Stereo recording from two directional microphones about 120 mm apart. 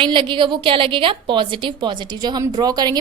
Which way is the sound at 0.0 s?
40° right (ahead or behind).